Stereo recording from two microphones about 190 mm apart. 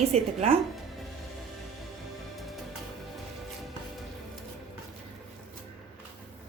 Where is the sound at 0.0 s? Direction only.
35° right (ahead or behind).